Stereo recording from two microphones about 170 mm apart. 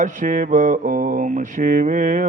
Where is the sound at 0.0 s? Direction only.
50° right (ahead or behind).